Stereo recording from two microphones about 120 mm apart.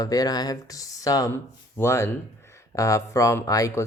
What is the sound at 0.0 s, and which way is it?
Speech, 30° left (ahead or behind).